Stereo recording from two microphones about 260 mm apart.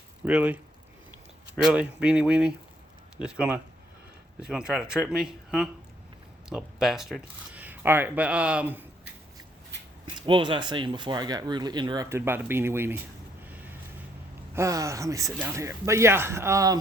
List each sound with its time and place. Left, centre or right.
0.3 s speech: centre
10.2 s speech: centre
13.5 s a sound: centre
14.5 s speech: centre